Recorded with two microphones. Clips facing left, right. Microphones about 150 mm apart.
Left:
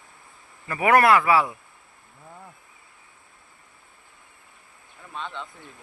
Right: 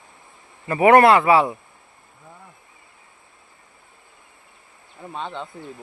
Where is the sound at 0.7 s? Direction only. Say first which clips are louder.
Right 5 dB; 25° right (ahead or behind).